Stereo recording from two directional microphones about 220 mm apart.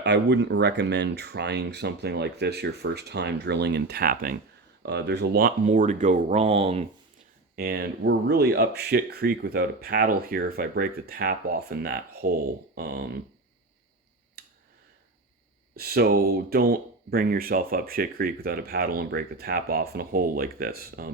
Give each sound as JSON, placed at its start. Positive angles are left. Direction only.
{"t": 0.0, "sound": "speech", "side_deg": -50}
{"t": 7.5, "sound": "speech", "side_deg": -45}
{"t": 14.4, "sound": "a sound", "side_deg": -45}
{"t": 15.7, "sound": "speech", "side_deg": -45}